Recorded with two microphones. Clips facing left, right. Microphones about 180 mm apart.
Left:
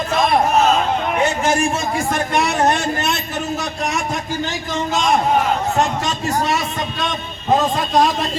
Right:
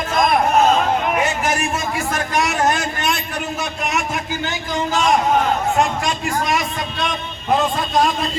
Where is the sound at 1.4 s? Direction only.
25° left (ahead or behind).